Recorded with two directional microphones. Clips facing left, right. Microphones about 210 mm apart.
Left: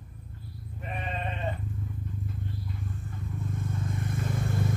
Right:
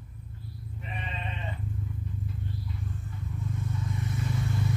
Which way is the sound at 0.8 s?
50° left (ahead or behind).